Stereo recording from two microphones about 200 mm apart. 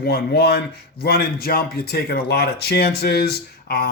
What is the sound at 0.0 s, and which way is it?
Speech, 50° left (ahead or behind).